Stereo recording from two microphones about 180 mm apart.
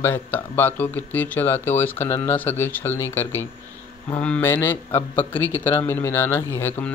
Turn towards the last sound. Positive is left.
turn(degrees=10)  # may be behind; listen again after turning